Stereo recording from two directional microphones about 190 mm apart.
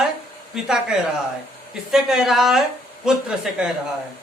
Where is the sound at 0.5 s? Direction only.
5° right (ahead or behind).